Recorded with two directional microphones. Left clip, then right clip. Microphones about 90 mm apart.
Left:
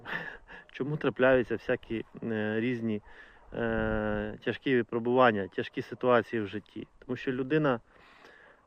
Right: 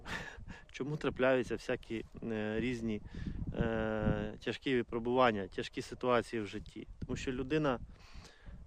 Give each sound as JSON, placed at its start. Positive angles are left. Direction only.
{"t": 0.0, "sound": "speech", "side_deg": -30}